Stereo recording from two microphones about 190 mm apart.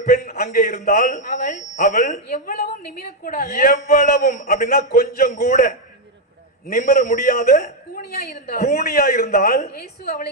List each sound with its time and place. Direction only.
0.0 s a sound: 50° left (ahead or behind)
0.5 s a man's voice: 55° left (ahead or behind)
6.7 s a man's voice: 50° left (ahead or behind)